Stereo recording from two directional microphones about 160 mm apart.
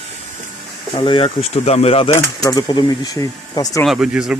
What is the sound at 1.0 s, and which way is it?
Speech, 30° left (ahead or behind).